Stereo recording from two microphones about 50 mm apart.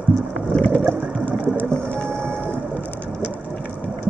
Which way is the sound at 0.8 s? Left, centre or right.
Right.